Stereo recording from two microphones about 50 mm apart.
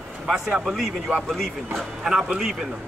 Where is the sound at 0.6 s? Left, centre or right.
Centre.